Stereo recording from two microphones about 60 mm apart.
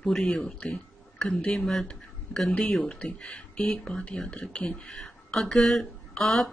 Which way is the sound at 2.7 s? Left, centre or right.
Centre.